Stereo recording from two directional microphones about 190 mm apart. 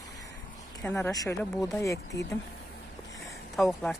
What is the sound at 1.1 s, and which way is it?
Speech, 20° left (ahead or behind).